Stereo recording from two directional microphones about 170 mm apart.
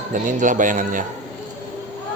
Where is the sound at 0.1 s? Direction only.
50° right (ahead or behind).